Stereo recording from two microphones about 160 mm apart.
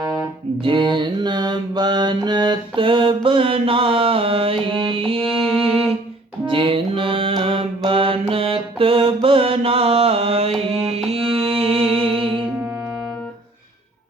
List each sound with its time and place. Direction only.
0.6 s mantra: 30° right (ahead or behind)
6.4 s mantra: 35° right (ahead or behind)
10.7 s music: 40° right (ahead or behind)